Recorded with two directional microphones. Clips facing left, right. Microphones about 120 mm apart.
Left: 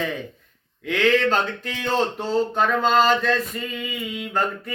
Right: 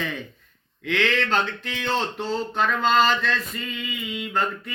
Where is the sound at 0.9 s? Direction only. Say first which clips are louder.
Left 4 dB; 40° left (ahead or behind).